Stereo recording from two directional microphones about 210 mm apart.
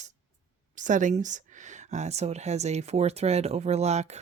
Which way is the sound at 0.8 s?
35° right (ahead or behind).